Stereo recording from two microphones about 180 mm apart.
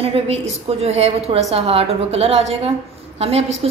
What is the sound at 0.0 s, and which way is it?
A woman's voice, 35° right (ahead or behind).